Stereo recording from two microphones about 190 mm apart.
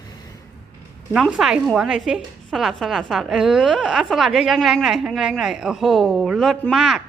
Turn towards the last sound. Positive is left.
turn(degrees=0)  # may be behind; listen again after turning